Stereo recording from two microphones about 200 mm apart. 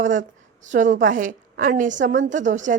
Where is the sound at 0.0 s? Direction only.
40° right (ahead or behind).